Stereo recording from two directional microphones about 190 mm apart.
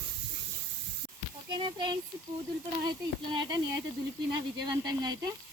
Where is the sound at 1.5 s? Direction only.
25° right (ahead or behind).